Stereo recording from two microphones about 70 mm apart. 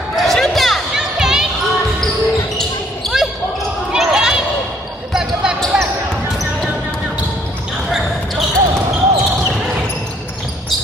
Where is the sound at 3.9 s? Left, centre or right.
Centre.